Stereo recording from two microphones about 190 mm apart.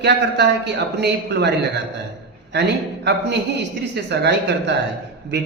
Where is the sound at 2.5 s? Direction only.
65° right (ahead or behind).